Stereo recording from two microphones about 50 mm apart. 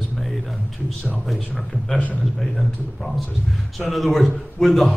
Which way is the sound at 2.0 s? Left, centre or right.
Left.